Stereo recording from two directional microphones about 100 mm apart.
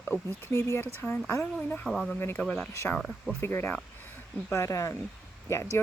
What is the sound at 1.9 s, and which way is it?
Speech, centre (ahead or behind).